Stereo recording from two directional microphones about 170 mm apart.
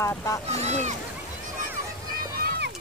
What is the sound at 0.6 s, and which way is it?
Speech, 45° right (ahead or behind).